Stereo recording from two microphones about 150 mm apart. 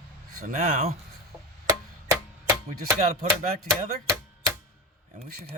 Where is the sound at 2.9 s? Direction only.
55° right (ahead or behind).